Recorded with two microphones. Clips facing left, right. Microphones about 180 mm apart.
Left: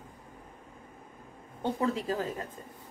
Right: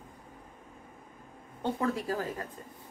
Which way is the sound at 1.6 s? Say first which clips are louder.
Left 1 dB; 20° left (ahead or behind).